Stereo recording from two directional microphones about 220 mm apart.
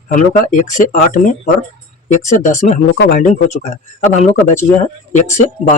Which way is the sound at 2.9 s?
50° left (ahead or behind).